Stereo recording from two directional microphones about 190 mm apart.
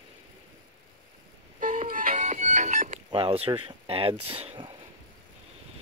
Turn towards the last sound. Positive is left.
turn(degrees=-30)  # may be behind; listen again after turning